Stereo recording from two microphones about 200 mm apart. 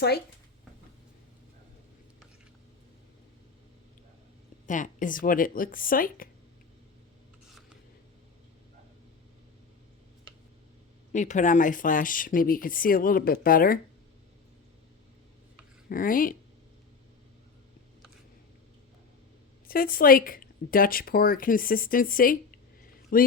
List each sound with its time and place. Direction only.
4.6 s speech: 40° left (ahead or behind)
11.1 s speech: 35° left (ahead or behind)
15.9 s speech: 45° left (ahead or behind)
19.6 s a man's voice: 45° left (ahead or behind)